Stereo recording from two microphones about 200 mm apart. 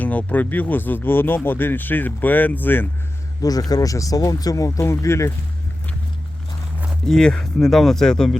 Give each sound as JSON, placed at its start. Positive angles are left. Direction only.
{"t": 0.0, "sound": "speech", "side_deg": 10}
{"t": 6.8, "sound": "speech", "side_deg": 5}